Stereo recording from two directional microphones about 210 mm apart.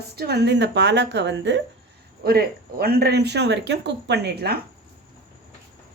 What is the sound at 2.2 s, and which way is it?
Speech, 45° right (ahead or behind).